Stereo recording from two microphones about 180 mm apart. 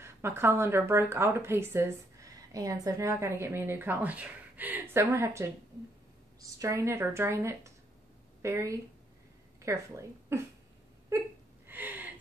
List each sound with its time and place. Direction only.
0.0 s a woman's voice: 15° right (ahead or behind)
11.1 s whimper: 15° right (ahead or behind)
11.6 s a sound: 10° right (ahead or behind)